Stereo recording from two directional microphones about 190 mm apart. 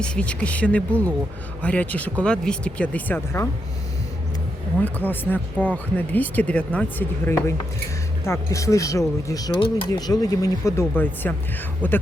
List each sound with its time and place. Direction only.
0.0 s speech: 5° left (ahead or behind)
4.8 s speech: 10° left (ahead or behind)